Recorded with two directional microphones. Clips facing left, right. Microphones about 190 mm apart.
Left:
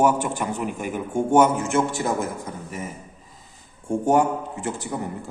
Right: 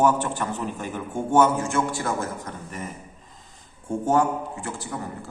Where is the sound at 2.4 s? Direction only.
10° left (ahead or behind).